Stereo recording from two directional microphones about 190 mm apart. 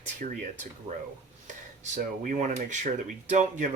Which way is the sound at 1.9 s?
40° right (ahead or behind).